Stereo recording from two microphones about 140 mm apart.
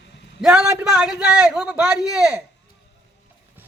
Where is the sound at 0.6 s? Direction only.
10° right (ahead or behind).